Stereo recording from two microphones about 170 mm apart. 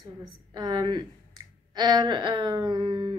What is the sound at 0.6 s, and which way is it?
A woman's voice, 25° right (ahead or behind).